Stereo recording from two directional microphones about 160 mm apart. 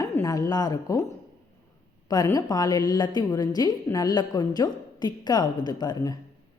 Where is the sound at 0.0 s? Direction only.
20° left (ahead or behind).